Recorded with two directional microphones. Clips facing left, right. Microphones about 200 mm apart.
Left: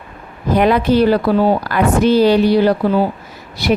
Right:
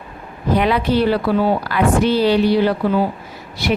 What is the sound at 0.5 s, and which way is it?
Speech, 45° left (ahead or behind).